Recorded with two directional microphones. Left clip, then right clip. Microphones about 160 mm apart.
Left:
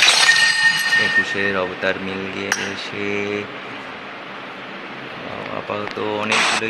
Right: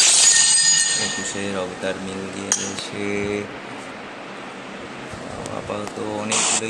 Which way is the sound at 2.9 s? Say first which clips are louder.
Left 1 dB; 15° right (ahead or behind).